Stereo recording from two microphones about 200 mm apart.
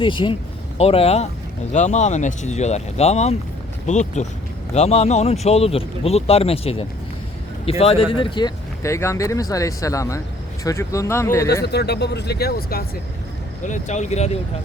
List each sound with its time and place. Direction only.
0.0 s speech: 25° left (ahead or behind)
11.6 s speech: 55° left (ahead or behind)
13.7 s speech: 40° left (ahead or behind)